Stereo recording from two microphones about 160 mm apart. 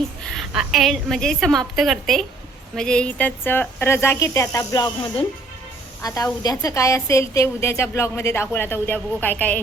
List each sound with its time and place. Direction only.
0.3 s a woman's voice: centre (ahead or behind)